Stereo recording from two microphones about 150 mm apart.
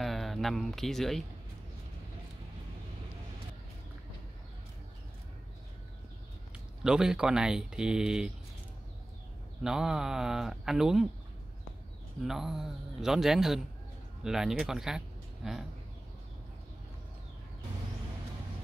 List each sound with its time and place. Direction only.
0.0 s speech: centre (ahead or behind)
6.8 s speech: 5° right (ahead or behind)
9.6 s speech: 5° right (ahead or behind)
12.3 s speech: centre (ahead or behind)